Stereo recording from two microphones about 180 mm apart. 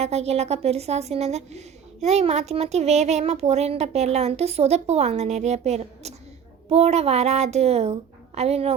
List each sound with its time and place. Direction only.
0.0 s a woman's voice: 35° right (ahead or behind)